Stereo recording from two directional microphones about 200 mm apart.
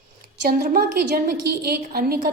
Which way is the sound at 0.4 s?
50° right (ahead or behind).